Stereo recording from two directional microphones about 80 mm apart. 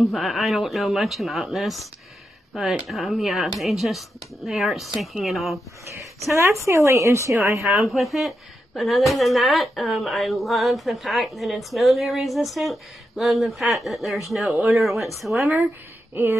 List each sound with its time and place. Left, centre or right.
0.0 s a woman's voice: centre
6.3 s speech: right
7.6 s a woman's voice: centre
15.3 s speech: right